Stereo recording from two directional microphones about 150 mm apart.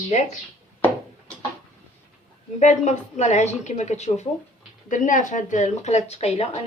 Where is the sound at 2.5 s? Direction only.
50° left (ahead or behind).